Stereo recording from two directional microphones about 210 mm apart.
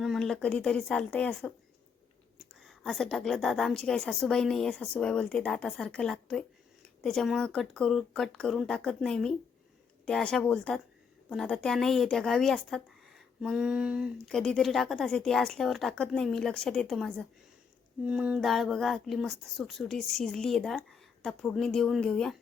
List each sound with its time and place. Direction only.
0.0 s speech: centre (ahead or behind)
2.6 s speech: centre (ahead or behind)